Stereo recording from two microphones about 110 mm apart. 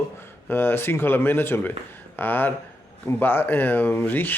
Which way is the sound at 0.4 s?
20° left (ahead or behind).